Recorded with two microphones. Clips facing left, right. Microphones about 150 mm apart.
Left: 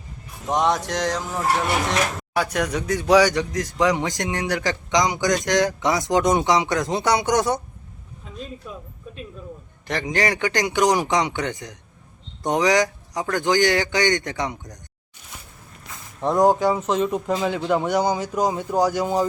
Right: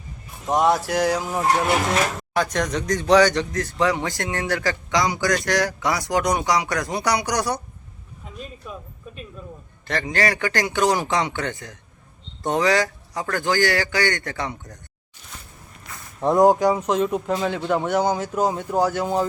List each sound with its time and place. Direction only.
0.4 s fowl: 5° right (ahead or behind)
2.3 s speech: 10° left (ahead or behind)
9.8 s speech: 15° left (ahead or behind)
16.2 s speech: centre (ahead or behind)
18.3 s speech: 5° right (ahead or behind)